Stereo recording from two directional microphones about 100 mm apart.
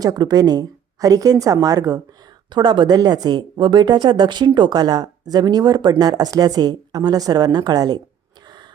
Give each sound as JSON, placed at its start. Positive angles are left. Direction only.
{"t": 0.0, "sound": "a woman's voice", "side_deg": -40}
{"t": 2.5, "sound": "speech", "side_deg": -50}